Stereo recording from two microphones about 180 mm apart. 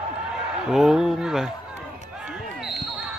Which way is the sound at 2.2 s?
5° right (ahead or behind).